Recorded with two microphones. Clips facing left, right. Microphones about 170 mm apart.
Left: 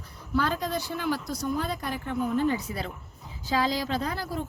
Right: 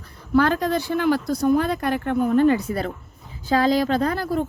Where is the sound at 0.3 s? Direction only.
65° right (ahead or behind).